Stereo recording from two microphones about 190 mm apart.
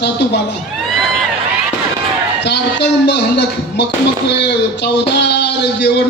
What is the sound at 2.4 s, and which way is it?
A man's voice, 65° left (ahead or behind).